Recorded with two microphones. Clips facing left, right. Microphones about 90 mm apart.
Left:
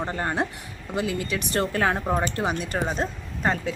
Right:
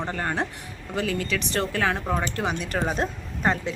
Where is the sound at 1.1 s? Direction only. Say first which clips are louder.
Right 1 dB; 15° left (ahead or behind).